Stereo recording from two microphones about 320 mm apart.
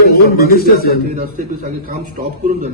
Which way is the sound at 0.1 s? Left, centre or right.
Left.